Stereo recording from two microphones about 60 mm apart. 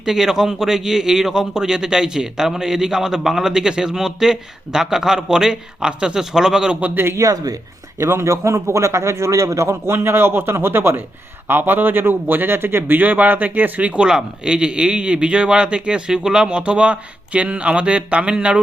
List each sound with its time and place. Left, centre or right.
0.0 s a man's voice: centre
6.9 s a man's voice: right
7.2 s speech: right
7.9 s a man's voice: right; by 18.6 s centre